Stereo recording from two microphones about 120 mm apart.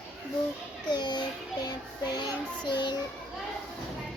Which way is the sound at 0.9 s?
35° left (ahead or behind).